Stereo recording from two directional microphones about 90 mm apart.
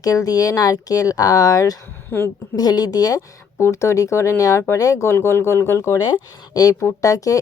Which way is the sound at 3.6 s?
30° left (ahead or behind).